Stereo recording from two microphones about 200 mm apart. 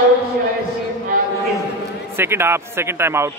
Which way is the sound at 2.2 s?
10° right (ahead or behind).